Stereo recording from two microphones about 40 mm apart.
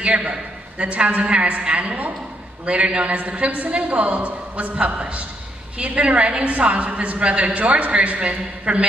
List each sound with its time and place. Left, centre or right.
0.0 s a woman's voice: right